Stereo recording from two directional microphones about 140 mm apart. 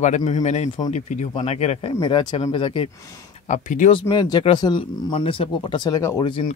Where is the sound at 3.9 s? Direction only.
30° left (ahead or behind).